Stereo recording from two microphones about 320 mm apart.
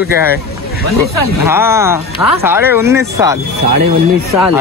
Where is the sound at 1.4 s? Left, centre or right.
Centre.